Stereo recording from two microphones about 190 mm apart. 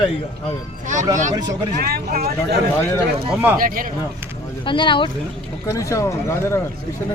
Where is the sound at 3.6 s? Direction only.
45° right (ahead or behind).